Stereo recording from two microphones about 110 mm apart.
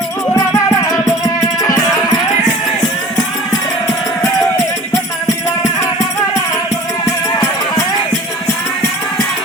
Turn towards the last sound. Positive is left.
turn(degrees=35)  # may be behind; listen again after turning